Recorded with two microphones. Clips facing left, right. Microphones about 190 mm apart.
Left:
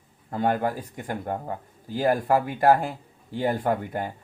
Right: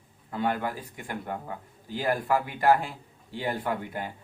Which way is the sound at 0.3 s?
45° left (ahead or behind).